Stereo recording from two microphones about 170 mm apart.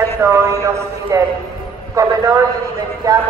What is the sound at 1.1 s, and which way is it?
A man's voice, 20° right (ahead or behind).